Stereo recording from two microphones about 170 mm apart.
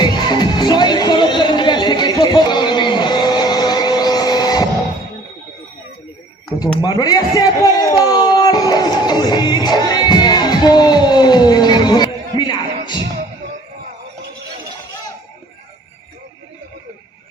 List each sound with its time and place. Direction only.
0.0 s music: 25° left (ahead or behind)
6.5 s a sound: 25° left (ahead or behind)
12.4 s music: 25° left (ahead or behind)